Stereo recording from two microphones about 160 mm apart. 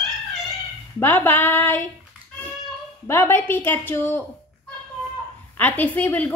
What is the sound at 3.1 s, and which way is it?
A woman's voice, 15° left (ahead or behind).